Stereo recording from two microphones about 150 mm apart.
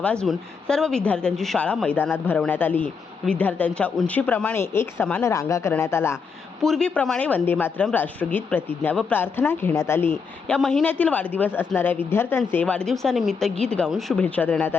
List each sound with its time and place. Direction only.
0.0 s speech: 5° left (ahead or behind)
6.6 s speech: 5° left (ahead or behind)